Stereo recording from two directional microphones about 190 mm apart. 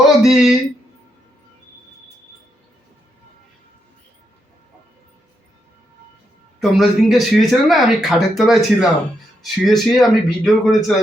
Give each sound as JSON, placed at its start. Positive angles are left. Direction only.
{"t": 0.2, "sound": "speech", "side_deg": 0}
{"t": 6.6, "sound": "speech", "side_deg": 0}